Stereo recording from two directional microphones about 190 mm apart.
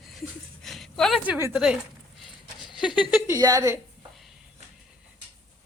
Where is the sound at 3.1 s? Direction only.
15° right (ahead or behind).